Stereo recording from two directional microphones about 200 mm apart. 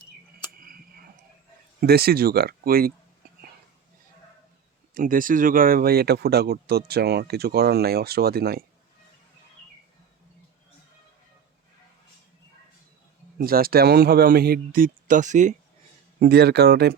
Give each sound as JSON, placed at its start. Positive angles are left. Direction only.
{"t": 0.6, "sound": "a sound", "side_deg": -45}
{"t": 1.8, "sound": "speech", "side_deg": -50}
{"t": 4.9, "sound": "speech", "side_deg": -45}
{"t": 13.4, "sound": "speech", "side_deg": -50}
{"t": 16.2, "sound": "speech", "side_deg": -55}